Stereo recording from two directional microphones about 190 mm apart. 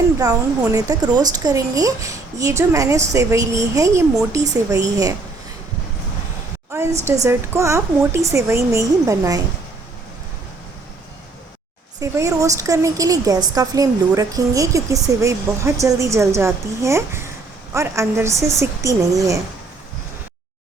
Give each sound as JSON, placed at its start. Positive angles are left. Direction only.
{"t": 0.6, "sound": "a woman's voice", "side_deg": -15}
{"t": 7.0, "sound": "a woman's voice", "side_deg": -15}
{"t": 11.9, "sound": "a woman's voice", "side_deg": -15}